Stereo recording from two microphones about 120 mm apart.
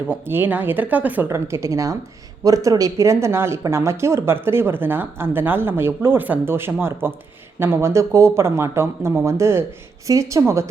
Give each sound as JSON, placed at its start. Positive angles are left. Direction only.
{"t": 0.1, "sound": "speech", "side_deg": -15}